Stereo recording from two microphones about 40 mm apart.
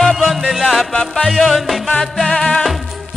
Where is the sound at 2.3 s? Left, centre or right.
Left.